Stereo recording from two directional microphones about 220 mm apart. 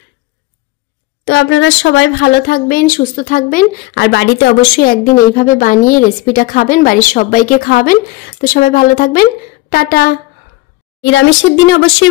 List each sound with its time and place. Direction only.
1.2 s speech: 55° left (ahead or behind); by 3.6 s 35° left (ahead or behind)
3.9 s speech: 50° left (ahead or behind)
11.0 s speech: 55° left (ahead or behind)